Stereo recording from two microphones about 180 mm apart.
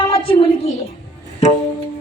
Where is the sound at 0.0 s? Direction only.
30° left (ahead or behind).